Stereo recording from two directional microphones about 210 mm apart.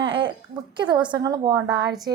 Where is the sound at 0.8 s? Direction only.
20° right (ahead or behind).